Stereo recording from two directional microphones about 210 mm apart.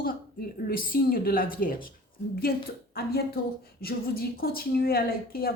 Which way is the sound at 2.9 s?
45° left (ahead or behind).